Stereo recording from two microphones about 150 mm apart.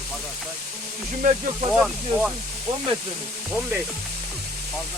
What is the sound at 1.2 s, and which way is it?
Speech, 65° right (ahead or behind).